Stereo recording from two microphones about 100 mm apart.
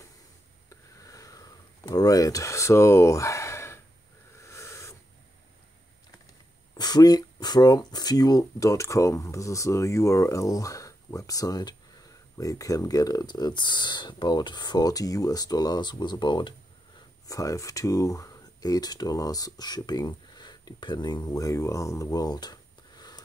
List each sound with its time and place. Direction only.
0.7 s a sound: 35° left (ahead or behind)
6.7 s speech: 40° left (ahead or behind)
17.3 s speech: 35° left (ahead or behind)